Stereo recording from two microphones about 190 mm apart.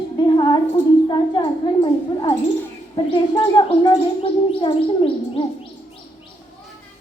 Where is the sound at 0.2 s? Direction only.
25° left (ahead or behind).